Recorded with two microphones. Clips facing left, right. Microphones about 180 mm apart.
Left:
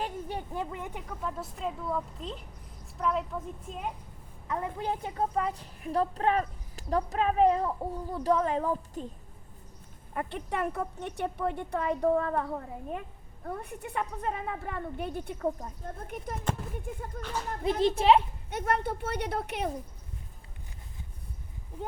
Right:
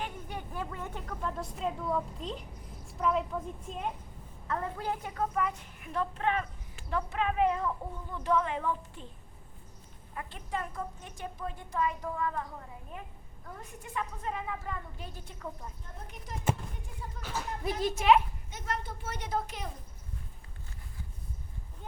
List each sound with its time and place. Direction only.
0.0 s a sound: 30° left (ahead or behind)
0.6 s a woman's voice: 20° left (ahead or behind); by 3.9 s centre (ahead or behind)
4.4 s a child's voice: 15° left (ahead or behind); by 9.0 s 40° left (ahead or behind)
10.2 s speech: 65° left (ahead or behind)
16.3 s a woman's voice: 5° right (ahead or behind)
17.2 s a child's voice: 45° left (ahead or behind)
17.7 s a woman's voice: 30° left (ahead or behind)
18.5 s speech: 60° left (ahead or behind)